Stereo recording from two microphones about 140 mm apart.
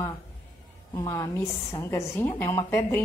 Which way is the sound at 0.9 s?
20° left (ahead or behind).